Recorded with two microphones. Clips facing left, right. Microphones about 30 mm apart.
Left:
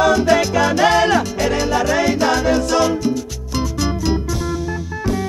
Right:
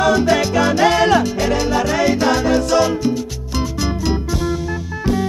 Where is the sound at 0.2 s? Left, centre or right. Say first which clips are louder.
Even; centre.